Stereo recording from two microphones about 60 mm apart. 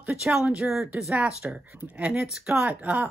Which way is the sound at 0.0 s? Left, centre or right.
Centre.